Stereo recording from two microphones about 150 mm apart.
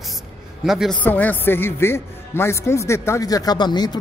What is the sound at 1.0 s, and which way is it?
Speech, 10° left (ahead or behind).